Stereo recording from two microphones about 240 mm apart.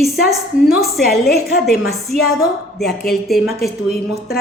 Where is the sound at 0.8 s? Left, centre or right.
Centre.